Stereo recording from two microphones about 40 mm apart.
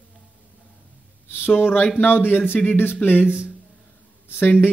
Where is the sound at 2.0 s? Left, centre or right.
Left.